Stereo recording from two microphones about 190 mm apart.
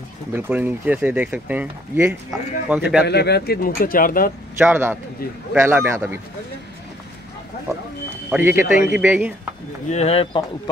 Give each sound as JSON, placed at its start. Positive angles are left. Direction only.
{"t": 0.3, "sound": "speech", "side_deg": -10}
{"t": 3.1, "sound": "speech", "side_deg": 60}
{"t": 4.6, "sound": "speech", "side_deg": -10}
{"t": 8.3, "sound": "speech", "side_deg": -10}
{"t": 9.8, "sound": "speech", "side_deg": 35}